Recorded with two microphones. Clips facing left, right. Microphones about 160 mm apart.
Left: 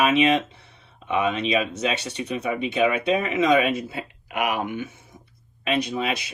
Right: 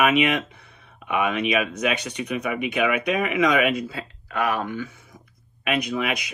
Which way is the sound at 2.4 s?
30° left (ahead or behind).